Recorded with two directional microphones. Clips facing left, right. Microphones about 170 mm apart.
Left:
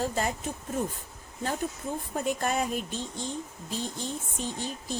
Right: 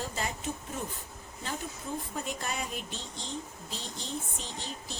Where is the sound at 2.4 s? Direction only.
45° left (ahead or behind).